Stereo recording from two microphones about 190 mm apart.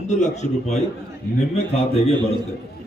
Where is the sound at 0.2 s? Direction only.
35° left (ahead or behind).